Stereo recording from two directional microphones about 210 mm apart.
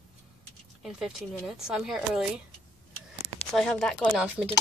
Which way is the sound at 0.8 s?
5° right (ahead or behind).